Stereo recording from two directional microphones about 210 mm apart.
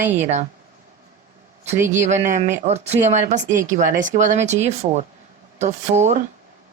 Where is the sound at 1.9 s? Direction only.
35° right (ahead or behind).